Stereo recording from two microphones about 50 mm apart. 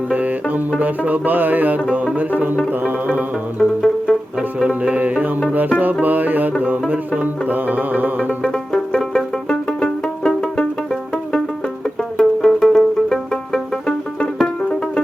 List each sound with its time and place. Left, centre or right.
0.1 s music: right
3.6 s music: centre
4.7 s music: right
8.5 s music: centre
12.1 s music: centre